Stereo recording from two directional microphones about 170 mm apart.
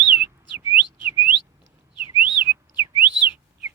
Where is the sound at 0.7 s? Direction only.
15° right (ahead or behind).